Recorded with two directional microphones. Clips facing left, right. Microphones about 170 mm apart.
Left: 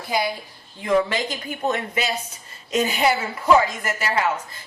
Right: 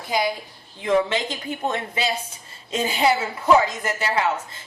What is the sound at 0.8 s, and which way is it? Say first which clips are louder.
A woman's voice: even; 25° right (ahead or behind).